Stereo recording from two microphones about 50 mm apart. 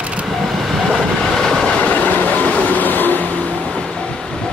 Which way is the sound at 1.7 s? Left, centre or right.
Left.